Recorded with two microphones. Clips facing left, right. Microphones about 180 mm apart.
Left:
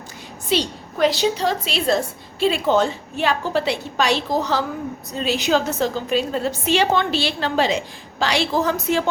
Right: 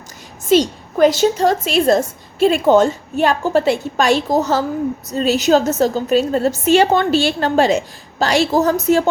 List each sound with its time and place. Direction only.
0.4 s a woman's voice: 45° right (ahead or behind)